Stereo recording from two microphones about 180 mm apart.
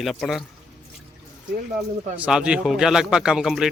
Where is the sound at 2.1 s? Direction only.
5° right (ahead or behind).